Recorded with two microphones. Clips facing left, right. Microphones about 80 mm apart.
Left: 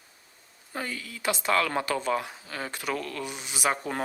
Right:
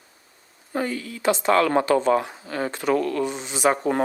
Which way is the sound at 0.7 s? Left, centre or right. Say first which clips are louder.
Right 8 dB; right.